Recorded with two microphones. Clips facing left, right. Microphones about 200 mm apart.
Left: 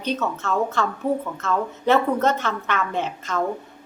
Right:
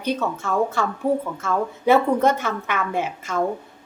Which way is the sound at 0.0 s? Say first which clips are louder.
Right 1 dB; 10° right (ahead or behind).